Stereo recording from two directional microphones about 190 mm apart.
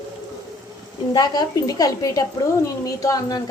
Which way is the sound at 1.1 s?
20° left (ahead or behind).